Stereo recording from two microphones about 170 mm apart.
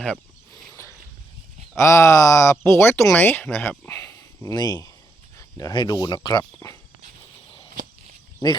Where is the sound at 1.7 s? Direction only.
15° left (ahead or behind).